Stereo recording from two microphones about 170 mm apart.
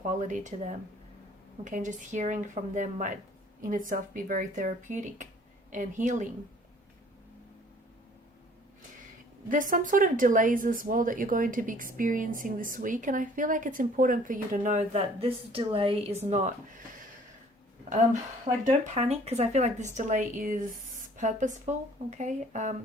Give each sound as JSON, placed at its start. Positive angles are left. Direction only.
{"t": 0.1, "sound": "speech", "side_deg": -45}
{"t": 9.5, "sound": "speech", "side_deg": -50}
{"t": 18.6, "sound": "speech", "side_deg": -40}